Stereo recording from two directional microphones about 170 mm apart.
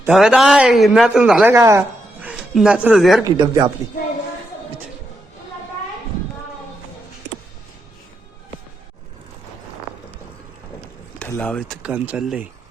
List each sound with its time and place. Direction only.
0.1 s a man's voice: 5° right (ahead or behind)
1.5 s speech: 20° right (ahead or behind)
2.2 s speech: 5° right (ahead or behind)
3.2 s speech: 25° right (ahead or behind)
11.3 s speech: 5° left (ahead or behind)
11.8 s speech: 10° right (ahead or behind)